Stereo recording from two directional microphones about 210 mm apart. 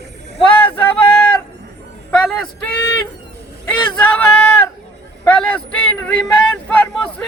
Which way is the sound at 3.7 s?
5° left (ahead or behind).